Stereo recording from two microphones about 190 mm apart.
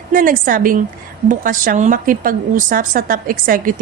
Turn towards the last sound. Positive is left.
turn(degrees=-45)  # may be behind; listen again after turning